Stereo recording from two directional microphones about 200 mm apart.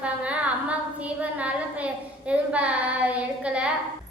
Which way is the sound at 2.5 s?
5° right (ahead or behind).